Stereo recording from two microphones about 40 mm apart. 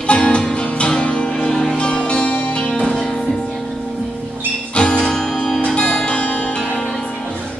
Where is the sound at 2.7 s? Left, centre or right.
Centre.